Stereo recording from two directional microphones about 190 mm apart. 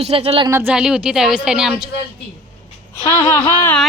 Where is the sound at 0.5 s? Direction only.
5° right (ahead or behind).